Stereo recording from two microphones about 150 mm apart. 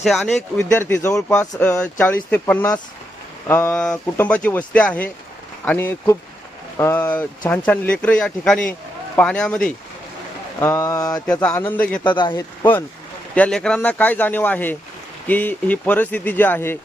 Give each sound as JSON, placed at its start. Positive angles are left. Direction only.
{"t": 0.0, "sound": "speech", "side_deg": 0}
{"t": 0.7, "sound": "speech", "side_deg": 15}
{"t": 10.6, "sound": "speech", "side_deg": 20}
{"t": 11.3, "sound": "speech", "side_deg": 5}
{"t": 12.0, "sound": "speech", "side_deg": 30}
{"t": 12.3, "sound": "speech", "side_deg": 15}